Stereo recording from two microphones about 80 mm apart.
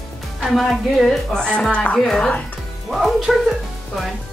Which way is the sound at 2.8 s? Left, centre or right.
Centre.